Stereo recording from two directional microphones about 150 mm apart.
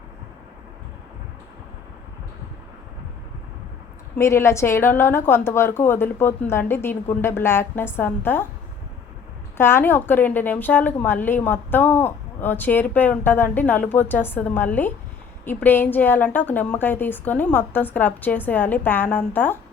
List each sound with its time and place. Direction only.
4.2 s a woman's voice: 20° left (ahead or behind)
9.6 s a woman's voice: 15° left (ahead or behind)